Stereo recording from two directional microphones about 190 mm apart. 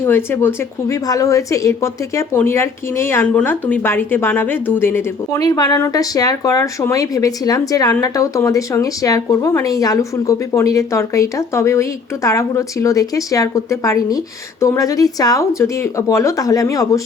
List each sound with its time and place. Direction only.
0.0 s a woman's voice: 10° left (ahead or behind)